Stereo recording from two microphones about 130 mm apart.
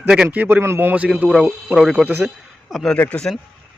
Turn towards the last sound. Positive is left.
turn(degrees=10)  # may be behind; listen again after turning